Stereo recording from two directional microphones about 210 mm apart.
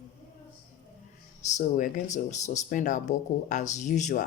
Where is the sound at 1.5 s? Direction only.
40° left (ahead or behind).